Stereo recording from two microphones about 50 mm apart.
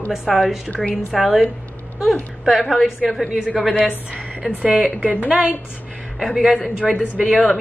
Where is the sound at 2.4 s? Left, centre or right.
Centre.